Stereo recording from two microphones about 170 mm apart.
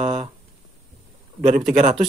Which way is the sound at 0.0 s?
35° right (ahead or behind).